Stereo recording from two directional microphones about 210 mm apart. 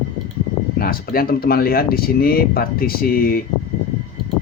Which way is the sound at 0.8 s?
45° left (ahead or behind).